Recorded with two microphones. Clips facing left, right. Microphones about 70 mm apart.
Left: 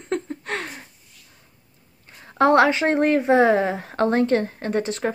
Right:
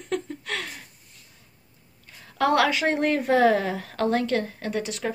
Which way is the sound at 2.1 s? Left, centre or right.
Left.